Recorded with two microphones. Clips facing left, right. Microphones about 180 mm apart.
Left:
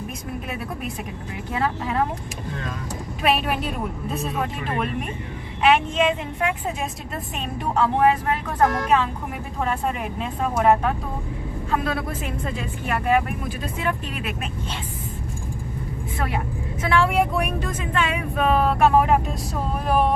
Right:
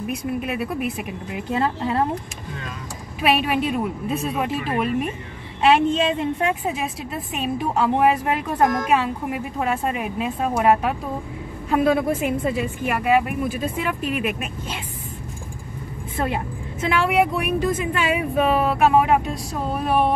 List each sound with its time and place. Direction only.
1.5 s speech: 30° right (ahead or behind)
3.2 s speech: 5° right (ahead or behind)
5.6 s speech: 30° right (ahead or behind)
7.3 s speech: 10° right (ahead or behind)
16.9 s speech: 5° right (ahead or behind)